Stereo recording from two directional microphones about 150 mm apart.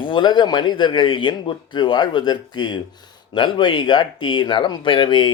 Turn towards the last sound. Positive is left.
turn(degrees=35)  # may be behind; listen again after turning